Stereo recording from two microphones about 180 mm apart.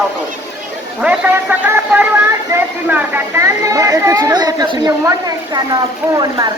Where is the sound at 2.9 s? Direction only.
10° right (ahead or behind).